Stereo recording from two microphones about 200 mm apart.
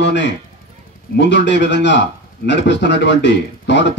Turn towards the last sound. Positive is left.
turn(degrees=60)  # may be behind; listen again after turning